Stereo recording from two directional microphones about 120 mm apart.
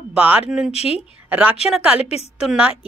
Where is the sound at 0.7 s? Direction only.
60° left (ahead or behind).